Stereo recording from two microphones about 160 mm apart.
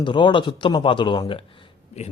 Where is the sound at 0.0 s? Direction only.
30° left (ahead or behind).